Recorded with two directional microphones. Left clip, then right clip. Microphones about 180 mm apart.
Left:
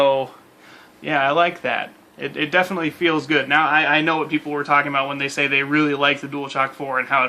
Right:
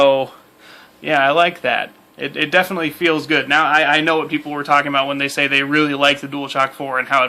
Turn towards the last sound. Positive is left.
turn(degrees=-50)  # may be behind; listen again after turning